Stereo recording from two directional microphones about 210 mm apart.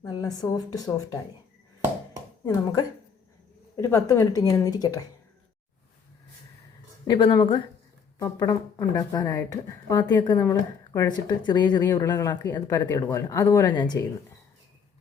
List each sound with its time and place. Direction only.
0.0 s a woman's voice: 20° left (ahead or behind)
3.8 s a woman's voice: 15° left (ahead or behind)
7.1 s speech: 25° left (ahead or behind)